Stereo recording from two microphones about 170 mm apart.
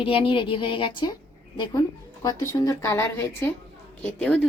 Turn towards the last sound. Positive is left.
turn(degrees=5)  # may be behind; listen again after turning